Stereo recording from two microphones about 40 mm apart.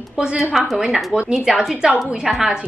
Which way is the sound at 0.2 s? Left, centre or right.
Right.